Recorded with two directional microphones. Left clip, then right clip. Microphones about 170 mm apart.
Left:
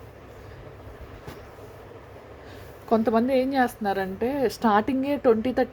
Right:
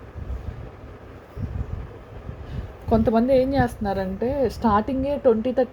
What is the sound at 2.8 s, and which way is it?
A woman's voice, 10° left (ahead or behind).